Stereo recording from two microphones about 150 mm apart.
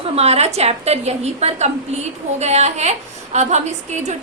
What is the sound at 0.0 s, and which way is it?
A woman's voice, 45° right (ahead or behind).